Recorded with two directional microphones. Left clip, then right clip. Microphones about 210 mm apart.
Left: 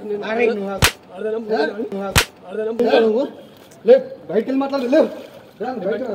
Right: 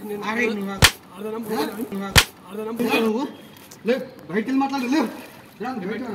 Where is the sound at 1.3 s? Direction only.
60° right (ahead or behind).